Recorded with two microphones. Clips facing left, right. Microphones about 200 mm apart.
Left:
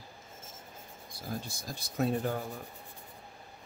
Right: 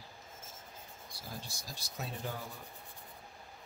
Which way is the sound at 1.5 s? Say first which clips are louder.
Left 5 dB; 55° left (ahead or behind).